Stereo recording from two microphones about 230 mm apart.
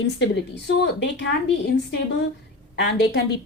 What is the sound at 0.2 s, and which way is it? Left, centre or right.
Speech, left.